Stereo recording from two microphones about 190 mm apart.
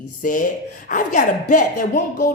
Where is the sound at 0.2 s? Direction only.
45° left (ahead or behind).